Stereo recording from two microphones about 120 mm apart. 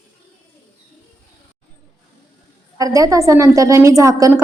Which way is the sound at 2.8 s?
30° right (ahead or behind).